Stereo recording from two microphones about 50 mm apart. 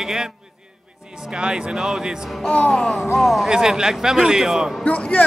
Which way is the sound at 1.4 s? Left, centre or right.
Centre.